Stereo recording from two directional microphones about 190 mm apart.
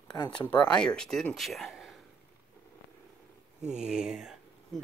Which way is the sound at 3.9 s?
5° right (ahead or behind).